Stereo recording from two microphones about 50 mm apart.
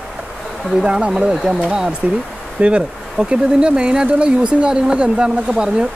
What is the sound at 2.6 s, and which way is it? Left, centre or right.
Speech, right.